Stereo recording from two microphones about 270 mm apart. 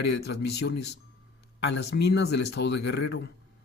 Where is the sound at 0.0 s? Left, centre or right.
Left.